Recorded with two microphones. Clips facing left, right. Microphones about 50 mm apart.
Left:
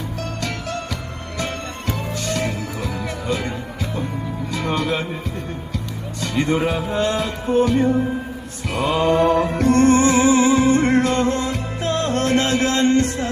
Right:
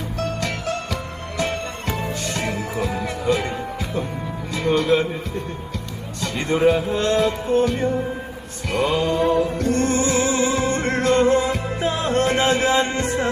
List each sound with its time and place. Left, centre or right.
1.9 s music: centre
4.5 s speech: centre
6.2 s music: centre
9.0 s music: left
9.3 s music: left
9.7 s music: left
10.3 s music: centre